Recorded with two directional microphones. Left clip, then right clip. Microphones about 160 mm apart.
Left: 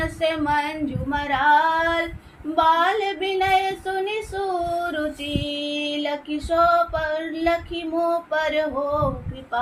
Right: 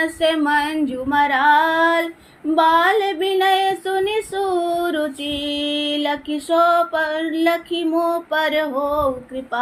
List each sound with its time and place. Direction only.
0.0 s female singing: 50° right (ahead or behind)